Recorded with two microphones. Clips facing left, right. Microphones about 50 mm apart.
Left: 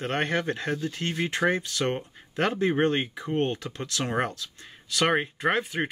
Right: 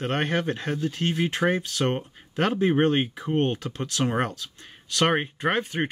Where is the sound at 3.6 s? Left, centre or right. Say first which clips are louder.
Right 4 dB; centre.